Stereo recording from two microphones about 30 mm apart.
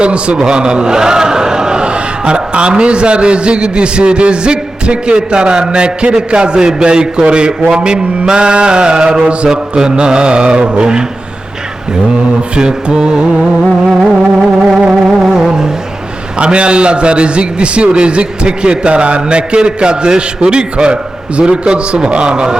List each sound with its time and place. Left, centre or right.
0.0 s a man's voice: right
9.5 s mantra: right
12.4 s a man's voice: right
13.8 s mantra: centre
15.0 s music: centre
16.4 s a man's voice: right